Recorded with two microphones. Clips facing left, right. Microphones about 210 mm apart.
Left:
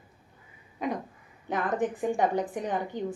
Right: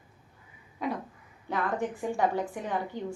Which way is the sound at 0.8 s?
20° left (ahead or behind).